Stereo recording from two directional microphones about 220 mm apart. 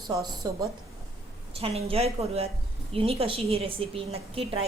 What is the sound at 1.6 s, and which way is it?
A woman's voice, 25° right (ahead or behind).